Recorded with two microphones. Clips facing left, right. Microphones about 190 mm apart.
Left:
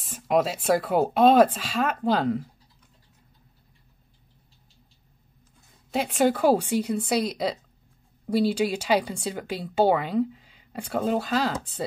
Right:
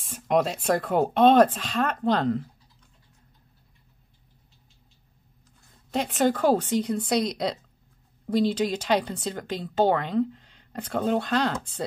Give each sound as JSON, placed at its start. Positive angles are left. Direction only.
{"t": 0.0, "sound": "speech", "side_deg": 0}
{"t": 5.9, "sound": "speech", "side_deg": 10}